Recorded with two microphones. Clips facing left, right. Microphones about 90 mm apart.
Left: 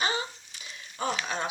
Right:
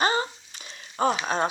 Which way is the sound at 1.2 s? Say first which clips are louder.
Right 7 dB; 40° right (ahead or behind).